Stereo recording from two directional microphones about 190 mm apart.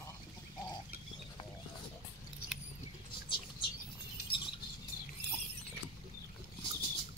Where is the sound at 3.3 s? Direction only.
25° left (ahead or behind).